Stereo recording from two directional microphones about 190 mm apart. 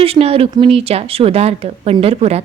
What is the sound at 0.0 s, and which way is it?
A woman's voice, 30° right (ahead or behind).